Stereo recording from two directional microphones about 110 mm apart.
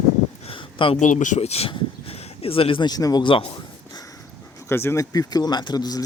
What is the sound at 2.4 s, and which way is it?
Speech, 55° left (ahead or behind).